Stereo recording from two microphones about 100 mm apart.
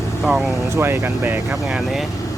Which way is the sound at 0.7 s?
25° right (ahead or behind).